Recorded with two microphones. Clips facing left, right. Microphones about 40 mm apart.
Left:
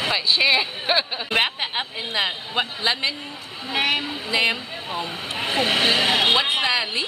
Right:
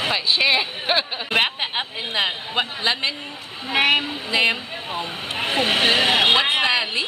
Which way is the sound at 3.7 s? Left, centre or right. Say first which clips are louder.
Right 4 dB; right.